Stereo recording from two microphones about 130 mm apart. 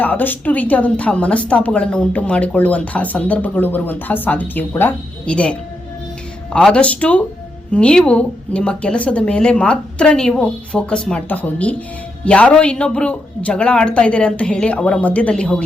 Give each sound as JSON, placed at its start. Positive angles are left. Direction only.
{"t": 0.0, "sound": "speech", "side_deg": 15}